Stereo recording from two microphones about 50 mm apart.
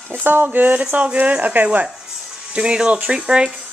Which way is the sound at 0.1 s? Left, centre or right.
Right.